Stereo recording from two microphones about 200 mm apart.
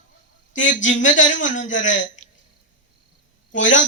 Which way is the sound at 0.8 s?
70° left (ahead or behind).